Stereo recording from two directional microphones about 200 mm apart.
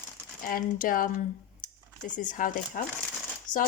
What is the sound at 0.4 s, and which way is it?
Speech, 45° left (ahead or behind).